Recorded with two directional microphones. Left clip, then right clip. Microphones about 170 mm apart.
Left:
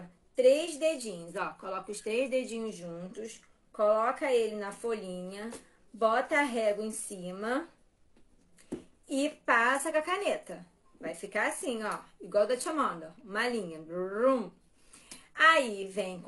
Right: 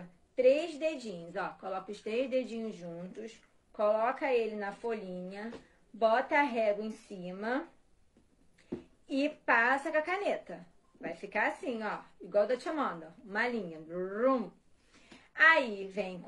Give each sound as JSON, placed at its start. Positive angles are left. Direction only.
{"t": 0.4, "sound": "speech", "side_deg": 30}
{"t": 9.1, "sound": "a woman's voice", "side_deg": 30}